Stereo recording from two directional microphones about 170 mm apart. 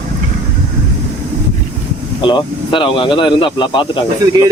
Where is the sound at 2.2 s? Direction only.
30° left (ahead or behind).